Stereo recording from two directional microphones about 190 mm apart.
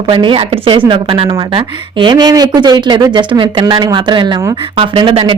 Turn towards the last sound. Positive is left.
turn(degrees=-30)  # may be behind; listen again after turning